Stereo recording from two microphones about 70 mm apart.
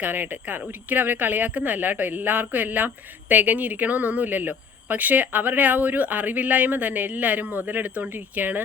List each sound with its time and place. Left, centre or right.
0.0 s speech: right